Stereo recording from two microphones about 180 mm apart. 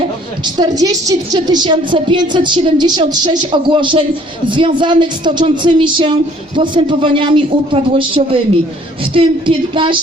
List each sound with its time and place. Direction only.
0.4 s a woman's voice: 25° right (ahead or behind)